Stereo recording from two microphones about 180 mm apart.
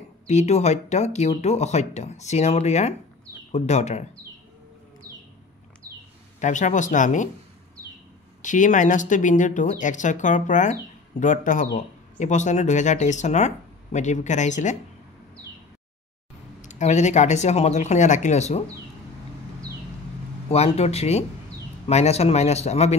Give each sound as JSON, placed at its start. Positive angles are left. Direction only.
{"t": 0.3, "sound": "speech", "side_deg": 40}
{"t": 6.4, "sound": "speech", "side_deg": 45}
{"t": 8.4, "sound": "speech", "side_deg": 45}
{"t": 16.6, "sound": "speech", "side_deg": 40}
{"t": 20.4, "sound": "speech", "side_deg": 35}